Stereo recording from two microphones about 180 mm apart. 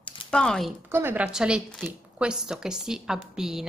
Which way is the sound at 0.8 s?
10° right (ahead or behind).